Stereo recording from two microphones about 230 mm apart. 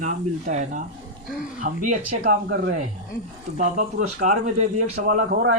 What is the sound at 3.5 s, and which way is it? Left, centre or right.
Speech, right.